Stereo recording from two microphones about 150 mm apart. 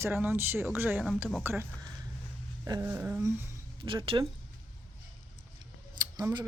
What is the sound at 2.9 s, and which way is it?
Speech, 10° right (ahead or behind).